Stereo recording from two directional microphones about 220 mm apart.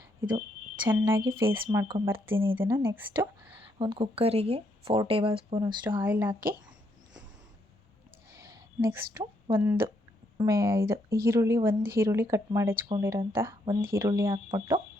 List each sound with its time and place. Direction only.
0.9 s speech: 10° right (ahead or behind)
1.5 s speech: 25° right (ahead or behind)
1.8 s speech: 10° right (ahead or behind)
3.2 s speech: 20° right (ahead or behind)
5.9 s speech: 10° right (ahead or behind)
8.3 s a sound: 15° right (ahead or behind)
9.1 s speech: 10° right (ahead or behind)